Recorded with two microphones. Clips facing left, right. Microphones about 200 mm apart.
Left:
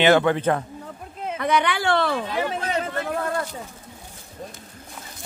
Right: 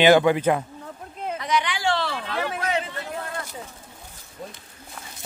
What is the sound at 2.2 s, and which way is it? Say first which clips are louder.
Speech: left 2 dB; 15° left (ahead or behind).